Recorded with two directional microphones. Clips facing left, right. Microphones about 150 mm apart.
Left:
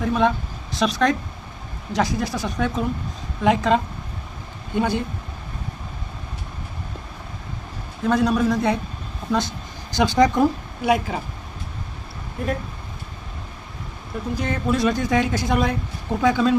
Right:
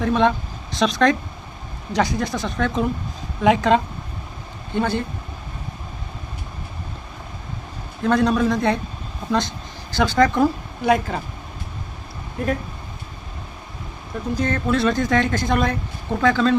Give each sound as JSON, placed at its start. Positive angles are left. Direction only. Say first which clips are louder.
{"t": 0.0, "sound": "a woman's voice", "louder": "right 2 dB", "side_deg": 5}
{"t": 4.7, "sound": "speech", "louder": "even", "side_deg": 10}
{"t": 8.0, "sound": "a woman's voice", "louder": "right 1 dB", "side_deg": 5}
{"t": 9.9, "sound": "speech", "louder": "even", "side_deg": 20}
{"t": 14.3, "sound": "speech", "louder": "right 2 dB", "side_deg": 10}